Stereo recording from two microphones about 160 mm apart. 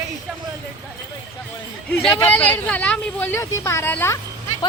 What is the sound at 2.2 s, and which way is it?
Speech, 10° left (ahead or behind).